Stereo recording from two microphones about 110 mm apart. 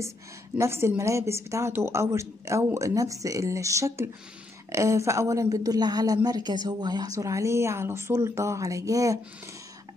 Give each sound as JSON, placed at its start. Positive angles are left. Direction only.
{"t": 0.6, "sound": "a woman's voice", "side_deg": -25}